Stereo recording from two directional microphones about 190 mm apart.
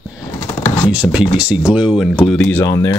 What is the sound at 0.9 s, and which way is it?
Speech, 5° right (ahead or behind).